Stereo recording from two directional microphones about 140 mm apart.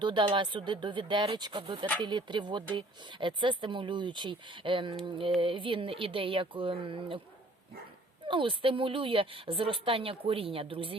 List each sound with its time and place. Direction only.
0.0 s a woman's voice: 35° right (ahead or behind)
8.3 s a woman's voice: 35° right (ahead or behind)